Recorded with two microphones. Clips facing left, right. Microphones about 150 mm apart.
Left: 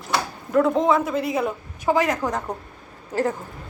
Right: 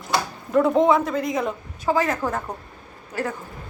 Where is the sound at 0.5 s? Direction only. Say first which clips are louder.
Right 1 dB; centre (ahead or behind); by 2.4 s 15° left (ahead or behind).